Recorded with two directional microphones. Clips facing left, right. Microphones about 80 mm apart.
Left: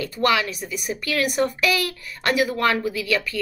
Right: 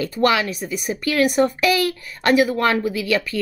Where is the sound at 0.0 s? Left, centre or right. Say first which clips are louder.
Right 3 dB; right.